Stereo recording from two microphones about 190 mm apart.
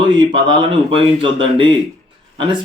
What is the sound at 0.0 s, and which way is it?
Speech, 25° right (ahead or behind).